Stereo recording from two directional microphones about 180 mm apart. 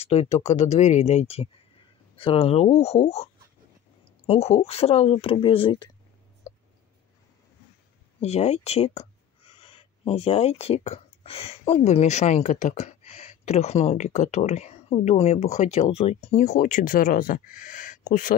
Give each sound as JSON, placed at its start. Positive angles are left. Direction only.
{"t": 0.0, "sound": "speech", "side_deg": 35}
{"t": 4.3, "sound": "speech", "side_deg": 35}
{"t": 8.2, "sound": "speech", "side_deg": 35}